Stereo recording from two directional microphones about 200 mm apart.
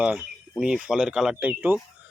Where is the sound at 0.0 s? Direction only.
5° right (ahead or behind).